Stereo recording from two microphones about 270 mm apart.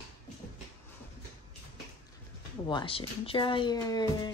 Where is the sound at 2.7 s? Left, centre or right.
Centre.